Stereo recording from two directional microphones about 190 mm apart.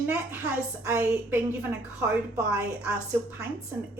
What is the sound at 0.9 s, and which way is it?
A woman's voice, 10° right (ahead or behind).